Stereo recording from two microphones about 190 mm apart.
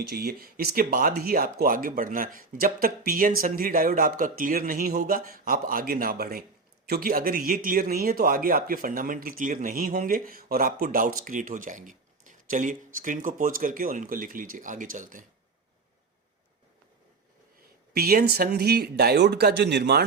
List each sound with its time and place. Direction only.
0.1 s speech: 55° right (ahead or behind)
17.9 s speech: 55° right (ahead or behind)